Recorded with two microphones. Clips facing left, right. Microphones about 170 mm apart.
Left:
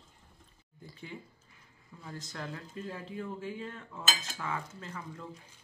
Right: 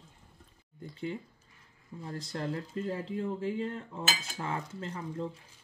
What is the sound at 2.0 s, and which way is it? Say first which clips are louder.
Speech: right 6 dB; 30° right (ahead or behind).